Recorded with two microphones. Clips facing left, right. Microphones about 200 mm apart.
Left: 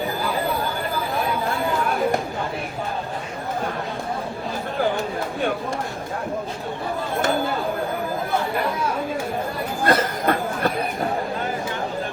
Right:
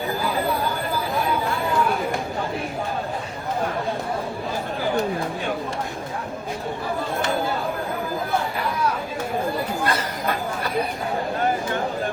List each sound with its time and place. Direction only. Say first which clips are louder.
9.8 s chatter: left 5 dB; 50° left (ahead or behind)